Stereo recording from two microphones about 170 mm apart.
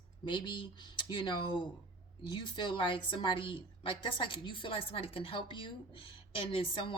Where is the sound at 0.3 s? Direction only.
30° left (ahead or behind).